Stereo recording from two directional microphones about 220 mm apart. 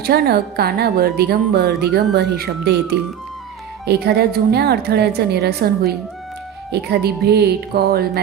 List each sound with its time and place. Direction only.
0.0 s a woman's voice: 45° right (ahead or behind)